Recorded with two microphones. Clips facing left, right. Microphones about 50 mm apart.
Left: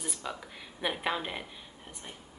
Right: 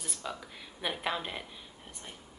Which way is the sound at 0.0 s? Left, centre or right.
Centre.